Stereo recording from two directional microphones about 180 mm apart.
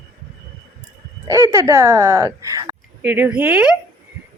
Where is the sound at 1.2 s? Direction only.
15° right (ahead or behind).